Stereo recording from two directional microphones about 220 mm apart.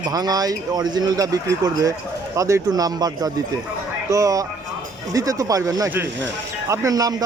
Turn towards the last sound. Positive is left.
turn(degrees=-15)  # may be behind; listen again after turning